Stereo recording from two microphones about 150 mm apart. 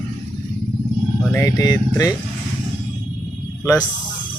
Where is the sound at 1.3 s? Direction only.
20° left (ahead or behind).